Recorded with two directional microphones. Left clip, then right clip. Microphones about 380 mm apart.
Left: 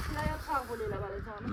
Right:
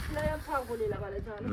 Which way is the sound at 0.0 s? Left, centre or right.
Centre.